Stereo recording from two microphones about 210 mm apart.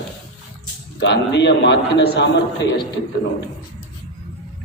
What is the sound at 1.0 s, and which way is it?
A man's voice, 55° left (ahead or behind).